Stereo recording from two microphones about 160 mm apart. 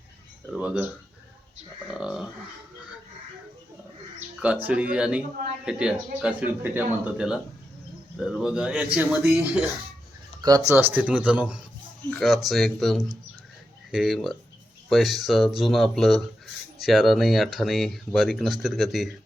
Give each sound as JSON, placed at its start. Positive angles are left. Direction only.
{"t": 0.5, "sound": "speech", "side_deg": -5}
{"t": 1.9, "sound": "speech", "side_deg": -5}
{"t": 4.4, "sound": "speech", "side_deg": -10}
{"t": 10.4, "sound": "speech", "side_deg": -20}